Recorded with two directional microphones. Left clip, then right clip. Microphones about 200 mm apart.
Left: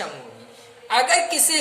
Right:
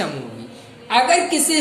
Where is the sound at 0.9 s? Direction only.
30° left (ahead or behind).